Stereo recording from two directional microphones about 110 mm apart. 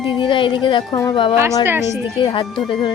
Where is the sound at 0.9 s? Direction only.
30° left (ahead or behind).